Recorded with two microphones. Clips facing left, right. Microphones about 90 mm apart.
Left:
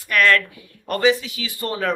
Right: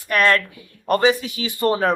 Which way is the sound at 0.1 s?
30° right (ahead or behind).